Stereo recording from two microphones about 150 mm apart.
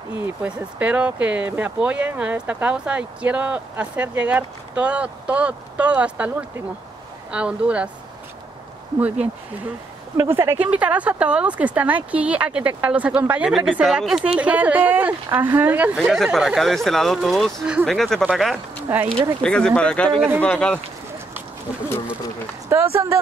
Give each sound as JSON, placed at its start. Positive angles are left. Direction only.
{"t": 0.4, "sound": "speech", "side_deg": -10}
{"t": 10.1, "sound": "speech", "side_deg": -15}
{"t": 16.0, "sound": "speech", "side_deg": 0}
{"t": 22.7, "sound": "speech", "side_deg": -15}